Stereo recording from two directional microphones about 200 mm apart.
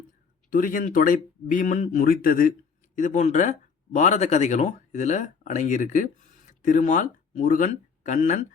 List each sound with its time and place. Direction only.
0.5 s speech: 45° left (ahead or behind)